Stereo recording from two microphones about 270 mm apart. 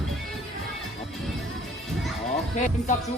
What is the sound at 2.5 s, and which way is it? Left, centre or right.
Speech, left.